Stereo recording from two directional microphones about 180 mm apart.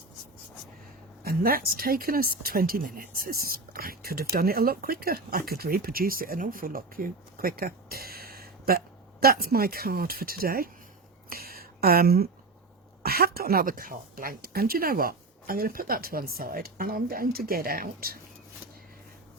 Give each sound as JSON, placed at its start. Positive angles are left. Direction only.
{"t": 1.2, "sound": "speech", "side_deg": -55}
{"t": 11.3, "sound": "a sound", "side_deg": -55}
{"t": 13.0, "sound": "speech", "side_deg": -60}